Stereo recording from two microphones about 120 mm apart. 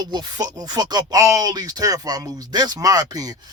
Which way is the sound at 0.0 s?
35° right (ahead or behind).